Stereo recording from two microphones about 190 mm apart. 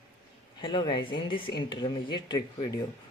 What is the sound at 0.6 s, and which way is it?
Speech, 25° left (ahead or behind).